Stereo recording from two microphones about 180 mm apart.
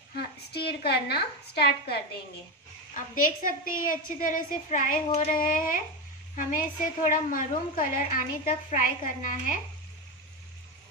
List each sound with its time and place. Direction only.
0.1 s a woman's voice: 65° left (ahead or behind)
2.9 s a woman's voice: 50° left (ahead or behind)